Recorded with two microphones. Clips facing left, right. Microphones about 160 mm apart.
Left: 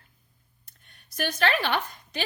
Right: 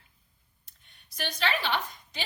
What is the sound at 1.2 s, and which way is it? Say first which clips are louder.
A woman's voice: left 5 dB; 55° left (ahead or behind).